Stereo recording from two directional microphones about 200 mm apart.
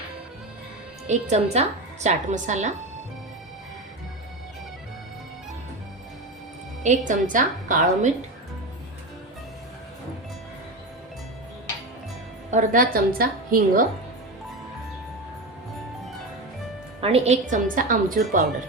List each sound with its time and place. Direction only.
1.0 s a woman's voice: 35° right (ahead or behind)
6.8 s a woman's voice: 40° right (ahead or behind)
12.5 s a woman's voice: 40° right (ahead or behind)
17.0 s a woman's voice: 30° right (ahead or behind)